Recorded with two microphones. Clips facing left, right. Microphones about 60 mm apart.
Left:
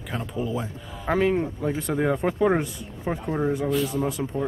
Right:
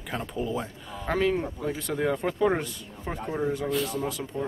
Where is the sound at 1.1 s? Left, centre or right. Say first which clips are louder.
Left 3 dB; left.